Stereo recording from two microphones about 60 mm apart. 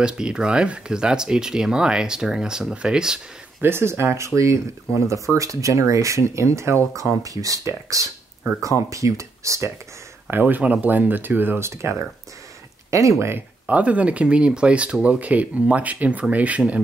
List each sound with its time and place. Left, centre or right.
0.0 s speech: centre
3.6 s speech: right
7.2 s speech: right
10.3 s speech: right
11.6 s speech: right
13.7 s speech: right